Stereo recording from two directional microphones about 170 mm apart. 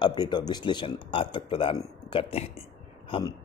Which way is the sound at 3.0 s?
30° left (ahead or behind).